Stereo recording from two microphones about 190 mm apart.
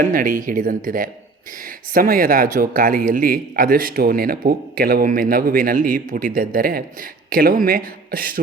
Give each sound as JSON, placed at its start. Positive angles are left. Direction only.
{"t": 0.0, "sound": "speech", "side_deg": -45}